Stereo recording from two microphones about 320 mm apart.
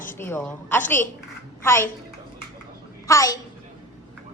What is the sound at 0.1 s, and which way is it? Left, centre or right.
A woman's voice, centre.